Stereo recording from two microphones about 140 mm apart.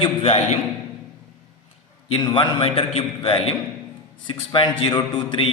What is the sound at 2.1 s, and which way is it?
A man's voice, 35° left (ahead or behind).